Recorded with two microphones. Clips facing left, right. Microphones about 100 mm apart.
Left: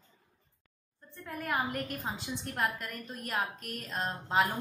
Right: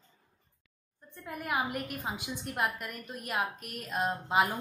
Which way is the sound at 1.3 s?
10° right (ahead or behind).